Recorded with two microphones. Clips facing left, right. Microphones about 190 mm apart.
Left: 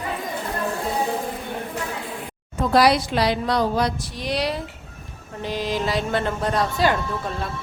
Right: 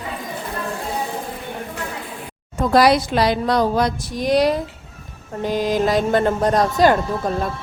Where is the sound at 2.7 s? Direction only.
45° right (ahead or behind).